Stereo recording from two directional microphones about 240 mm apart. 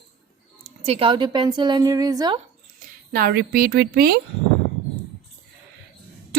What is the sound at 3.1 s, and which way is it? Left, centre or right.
A woman's voice, right.